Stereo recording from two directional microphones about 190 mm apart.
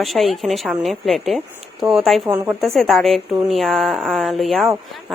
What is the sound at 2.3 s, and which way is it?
Speech, 15° right (ahead or behind).